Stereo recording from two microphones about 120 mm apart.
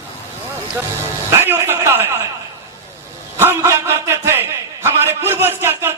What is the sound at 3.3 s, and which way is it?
A man's voice, 20° right (ahead or behind).